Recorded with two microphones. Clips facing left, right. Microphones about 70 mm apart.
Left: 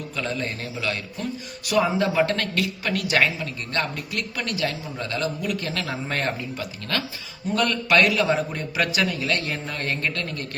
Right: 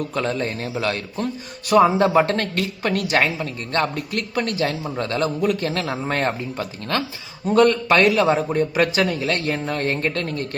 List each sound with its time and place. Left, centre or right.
0.1 s a man's voice: right